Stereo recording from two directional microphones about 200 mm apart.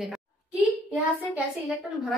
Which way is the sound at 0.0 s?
5° right (ahead or behind).